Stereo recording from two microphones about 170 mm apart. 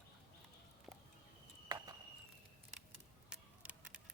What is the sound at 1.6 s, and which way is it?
Walk, 20° right (ahead or behind).